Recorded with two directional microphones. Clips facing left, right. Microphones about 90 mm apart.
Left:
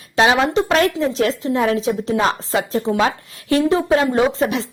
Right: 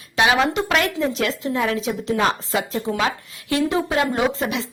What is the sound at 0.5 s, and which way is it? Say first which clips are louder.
Speech: left 5 dB; 35° left (ahead or behind).